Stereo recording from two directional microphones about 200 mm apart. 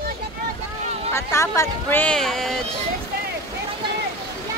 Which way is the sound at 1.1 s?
15° left (ahead or behind).